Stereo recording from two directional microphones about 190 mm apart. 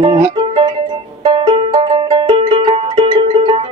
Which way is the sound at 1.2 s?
25° right (ahead or behind).